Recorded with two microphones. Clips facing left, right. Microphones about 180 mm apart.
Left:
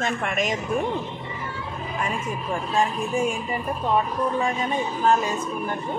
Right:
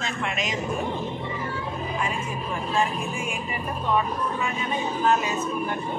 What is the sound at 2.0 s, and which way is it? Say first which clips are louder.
Speech: left 2 dB; 40° left (ahead or behind).